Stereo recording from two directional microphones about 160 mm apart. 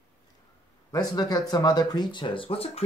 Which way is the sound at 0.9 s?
25° left (ahead or behind).